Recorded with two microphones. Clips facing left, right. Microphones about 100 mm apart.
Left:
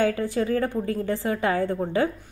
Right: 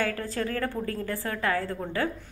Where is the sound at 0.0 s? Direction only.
15° left (ahead or behind).